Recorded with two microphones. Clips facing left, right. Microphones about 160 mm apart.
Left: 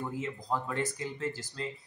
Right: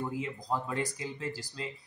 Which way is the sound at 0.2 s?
15° right (ahead or behind).